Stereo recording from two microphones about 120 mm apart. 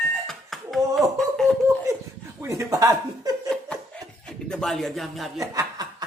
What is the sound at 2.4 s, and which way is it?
Speech, 25° right (ahead or behind).